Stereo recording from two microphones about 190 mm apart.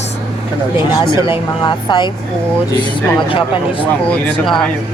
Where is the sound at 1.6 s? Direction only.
25° left (ahead or behind).